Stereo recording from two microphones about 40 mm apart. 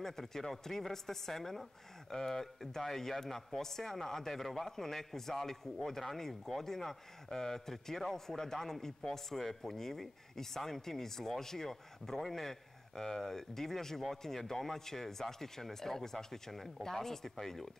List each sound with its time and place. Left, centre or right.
0.0 s speech: centre